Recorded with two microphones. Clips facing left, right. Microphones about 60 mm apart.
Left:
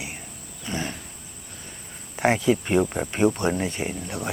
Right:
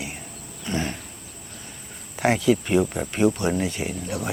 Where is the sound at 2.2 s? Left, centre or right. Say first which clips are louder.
Right 1 dB; left.